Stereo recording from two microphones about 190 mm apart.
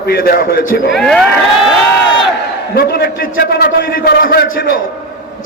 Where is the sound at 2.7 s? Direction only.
55° left (ahead or behind).